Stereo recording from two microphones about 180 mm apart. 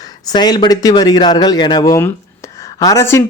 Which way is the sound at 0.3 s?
20° left (ahead or behind).